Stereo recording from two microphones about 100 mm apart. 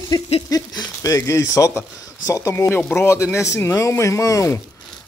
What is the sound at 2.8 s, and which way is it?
Speech, 20° left (ahead or behind).